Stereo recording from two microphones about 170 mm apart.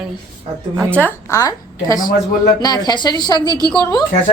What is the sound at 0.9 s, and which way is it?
A woman's voice, 10° left (ahead or behind).